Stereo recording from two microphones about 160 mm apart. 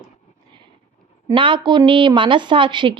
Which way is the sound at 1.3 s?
30° right (ahead or behind).